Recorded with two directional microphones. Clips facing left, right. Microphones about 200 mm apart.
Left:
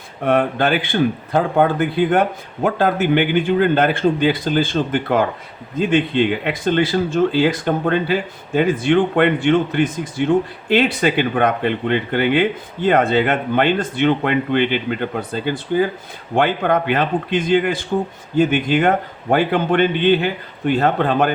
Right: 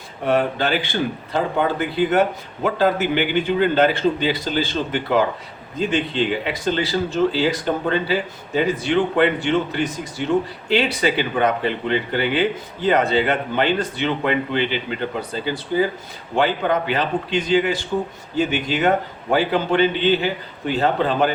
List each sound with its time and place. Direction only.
0.3 s speech: 55° left (ahead or behind)
16.3 s a man's voice: 55° left (ahead or behind)